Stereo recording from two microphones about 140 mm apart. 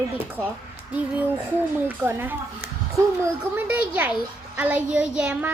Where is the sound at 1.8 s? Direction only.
15° right (ahead or behind).